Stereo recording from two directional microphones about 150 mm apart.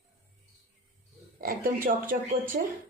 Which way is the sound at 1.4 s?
75° right (ahead or behind).